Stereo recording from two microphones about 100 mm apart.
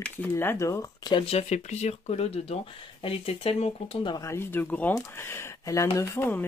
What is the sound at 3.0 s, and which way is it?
Speech, 75° left (ahead or behind).